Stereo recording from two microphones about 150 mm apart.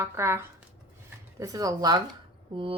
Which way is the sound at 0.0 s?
15° right (ahead or behind).